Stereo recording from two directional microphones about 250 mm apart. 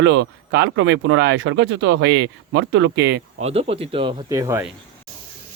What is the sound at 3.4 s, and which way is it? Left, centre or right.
Speech, right.